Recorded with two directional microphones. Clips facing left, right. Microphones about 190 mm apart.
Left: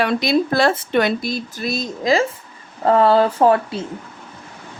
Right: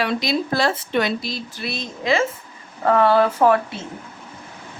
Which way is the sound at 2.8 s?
30° left (ahead or behind).